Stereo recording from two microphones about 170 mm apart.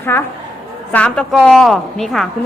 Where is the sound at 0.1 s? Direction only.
10° left (ahead or behind).